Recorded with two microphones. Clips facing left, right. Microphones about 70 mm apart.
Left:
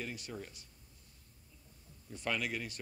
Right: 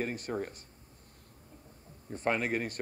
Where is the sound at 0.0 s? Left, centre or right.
Right.